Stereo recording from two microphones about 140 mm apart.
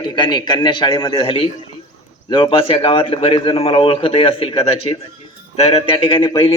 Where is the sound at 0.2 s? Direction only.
30° left (ahead or behind).